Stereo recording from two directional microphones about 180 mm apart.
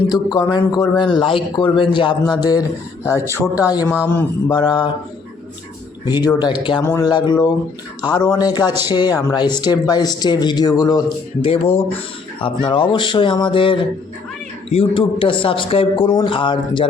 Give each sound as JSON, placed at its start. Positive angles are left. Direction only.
{"t": 0.3, "sound": "a man's voice", "side_deg": 25}
{"t": 4.5, "sound": "a man's voice", "side_deg": 25}
{"t": 6.1, "sound": "a man's voice", "side_deg": 25}
{"t": 11.4, "sound": "a man's voice", "side_deg": 30}